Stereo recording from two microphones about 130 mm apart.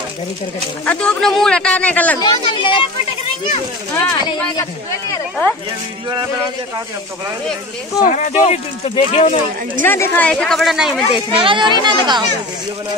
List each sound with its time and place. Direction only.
0.8 s a man's voice: 5° left (ahead or behind)
2.1 s speech: 40° left (ahead or behind)
8.0 s speech: 65° left (ahead or behind); by 9.3 s 50° left (ahead or behind)
9.8 s a woman's voice: 15° left (ahead or behind); by 11.1 s centre (ahead or behind)
11.3 s speech: 40° right (ahead or behind)